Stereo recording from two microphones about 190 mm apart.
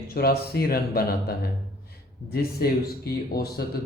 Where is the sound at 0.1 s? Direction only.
55° left (ahead or behind).